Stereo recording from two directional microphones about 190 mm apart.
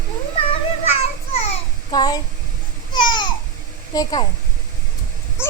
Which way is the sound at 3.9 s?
20° left (ahead or behind).